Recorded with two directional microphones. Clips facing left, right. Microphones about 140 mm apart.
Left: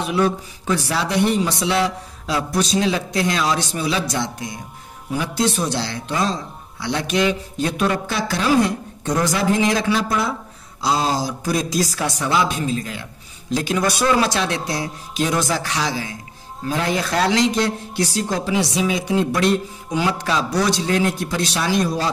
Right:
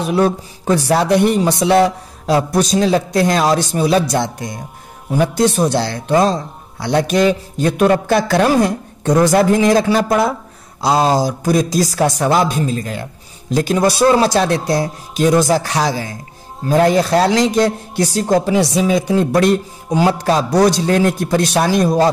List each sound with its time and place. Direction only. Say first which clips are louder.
0.0 s a man's voice: right 4 dB; 40° right (ahead or behind)
10.0 s a man's voice: right 7 dB; 50° right (ahead or behind)